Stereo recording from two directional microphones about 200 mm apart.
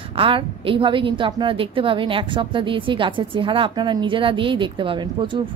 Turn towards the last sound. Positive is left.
turn(degrees=-25)  # may be behind; listen again after turning